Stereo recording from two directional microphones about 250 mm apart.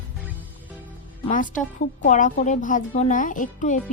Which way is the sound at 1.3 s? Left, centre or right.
Left.